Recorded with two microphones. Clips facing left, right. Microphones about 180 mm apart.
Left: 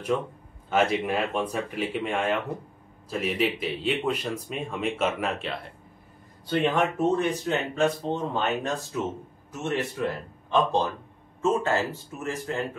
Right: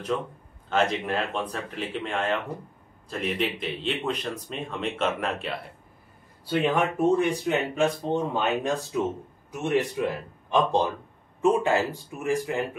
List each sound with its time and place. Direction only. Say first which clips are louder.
0.7 s speech: left 1 dB; 10° left (ahead or behind); by 12.6 s 15° right (ahead or behind)